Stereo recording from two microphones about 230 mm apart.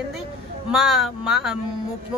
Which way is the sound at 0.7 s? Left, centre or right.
Centre.